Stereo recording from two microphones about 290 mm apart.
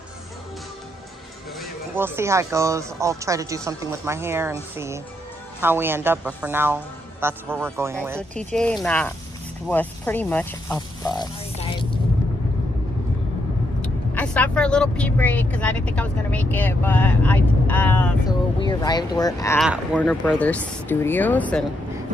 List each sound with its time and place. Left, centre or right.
1.6 s speech: centre
8.5 s speech: centre
13.7 s speech: centre
19.6 s speech: centre